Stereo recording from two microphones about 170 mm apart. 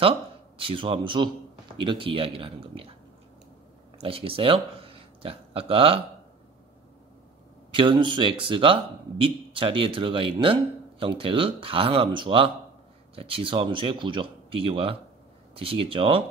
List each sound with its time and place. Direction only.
0.6 s speech: 30° right (ahead or behind)
4.0 s speech: 35° right (ahead or behind)
7.7 s speech: 30° right (ahead or behind)